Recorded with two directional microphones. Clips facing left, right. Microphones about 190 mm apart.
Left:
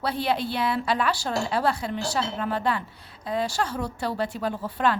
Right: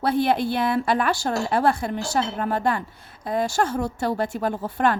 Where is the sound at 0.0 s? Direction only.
50° right (ahead or behind).